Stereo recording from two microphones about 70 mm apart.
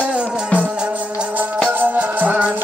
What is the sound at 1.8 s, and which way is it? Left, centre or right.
Music, right.